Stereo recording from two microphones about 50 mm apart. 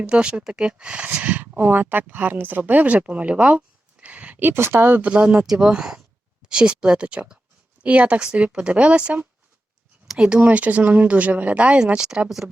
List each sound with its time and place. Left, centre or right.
0.0 s speech: right
1.5 s speech: right
4.4 s speech: right
5.0 s speech: right
10.4 s speech: right